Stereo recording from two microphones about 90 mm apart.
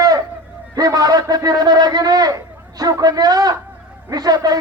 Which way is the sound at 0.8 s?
45° right (ahead or behind).